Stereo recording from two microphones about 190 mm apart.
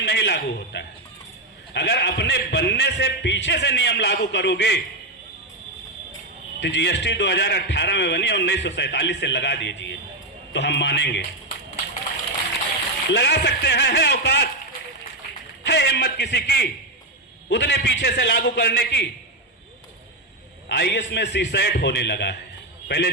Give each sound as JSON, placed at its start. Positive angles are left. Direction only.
{"t": 0.0, "sound": "a man's voice", "side_deg": 65}
{"t": 6.6, "sound": "a man's voice", "side_deg": 70}
{"t": 13.1, "sound": "a man's voice", "side_deg": 65}
{"t": 15.6, "sound": "a man's voice", "side_deg": 65}
{"t": 20.7, "sound": "a man's voice", "side_deg": 65}